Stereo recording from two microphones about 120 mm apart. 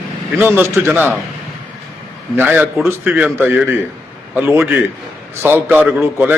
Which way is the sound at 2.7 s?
Centre (ahead or behind).